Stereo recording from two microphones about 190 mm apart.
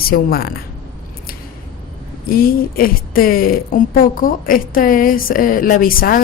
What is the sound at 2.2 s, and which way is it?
Speech, 50° left (ahead or behind).